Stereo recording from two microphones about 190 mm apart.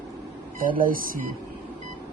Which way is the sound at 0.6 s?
45° right (ahead or behind).